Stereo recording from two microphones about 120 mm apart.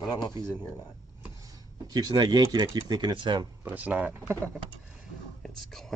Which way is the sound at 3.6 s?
15° right (ahead or behind).